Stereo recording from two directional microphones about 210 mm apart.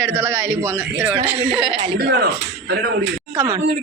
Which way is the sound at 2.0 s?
50° right (ahead or behind).